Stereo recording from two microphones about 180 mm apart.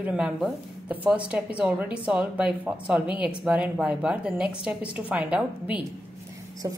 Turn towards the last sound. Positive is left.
turn(degrees=-20)  # may be behind; listen again after turning